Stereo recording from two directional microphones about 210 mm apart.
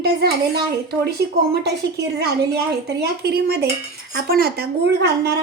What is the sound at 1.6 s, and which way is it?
A woman's voice, 55° right (ahead or behind).